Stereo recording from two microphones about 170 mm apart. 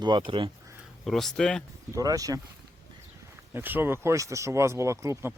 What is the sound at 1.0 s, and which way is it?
Speech, centre (ahead or behind).